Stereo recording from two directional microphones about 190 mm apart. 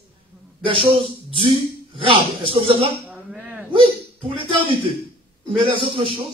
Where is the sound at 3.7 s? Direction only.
25° right (ahead or behind).